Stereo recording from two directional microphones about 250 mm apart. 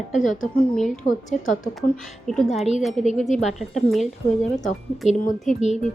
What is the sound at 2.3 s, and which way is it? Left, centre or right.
Speech, centre.